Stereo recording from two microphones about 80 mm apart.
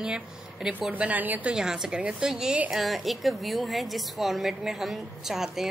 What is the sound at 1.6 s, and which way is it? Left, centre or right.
A woman's voice, centre.